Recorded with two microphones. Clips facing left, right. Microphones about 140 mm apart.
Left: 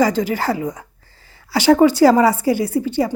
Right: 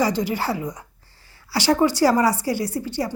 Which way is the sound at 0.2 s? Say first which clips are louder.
Left 4 dB; 90° left.